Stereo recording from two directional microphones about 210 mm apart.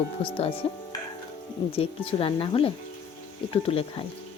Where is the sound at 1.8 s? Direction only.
25° left (ahead or behind).